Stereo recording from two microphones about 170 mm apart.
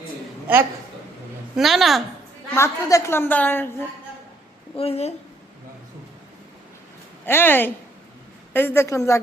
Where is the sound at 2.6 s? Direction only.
15° left (ahead or behind).